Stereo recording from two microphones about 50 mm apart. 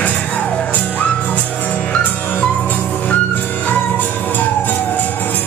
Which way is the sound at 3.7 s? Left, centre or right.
Left.